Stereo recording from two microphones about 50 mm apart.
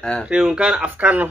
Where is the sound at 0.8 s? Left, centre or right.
Right.